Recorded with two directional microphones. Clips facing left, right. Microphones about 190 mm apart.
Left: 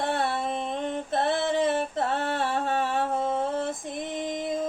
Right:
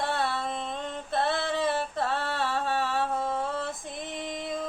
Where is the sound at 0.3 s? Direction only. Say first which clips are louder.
Left 3 dB; 20° left (ahead or behind).